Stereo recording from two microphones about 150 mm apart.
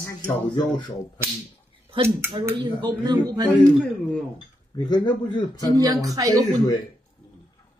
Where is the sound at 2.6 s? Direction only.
25° right (ahead or behind).